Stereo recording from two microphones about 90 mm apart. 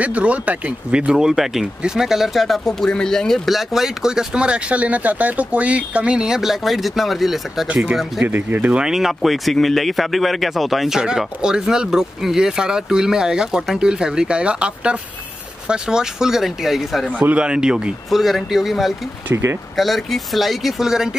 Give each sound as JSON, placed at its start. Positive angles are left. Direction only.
{"t": 0.0, "sound": "speech", "side_deg": -15}
{"t": 7.6, "sound": "speech", "side_deg": -15}
{"t": 8.8, "sound": "speech", "side_deg": -5}
{"t": 17.2, "sound": "speech", "side_deg": -15}